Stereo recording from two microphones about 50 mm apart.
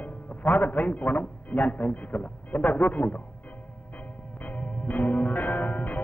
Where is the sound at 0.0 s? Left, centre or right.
Left.